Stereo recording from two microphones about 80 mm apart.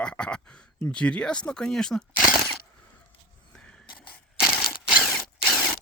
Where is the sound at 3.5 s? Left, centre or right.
Centre.